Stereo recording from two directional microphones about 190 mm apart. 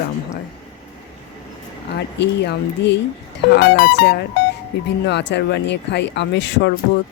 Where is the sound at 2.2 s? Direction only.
65° left (ahead or behind).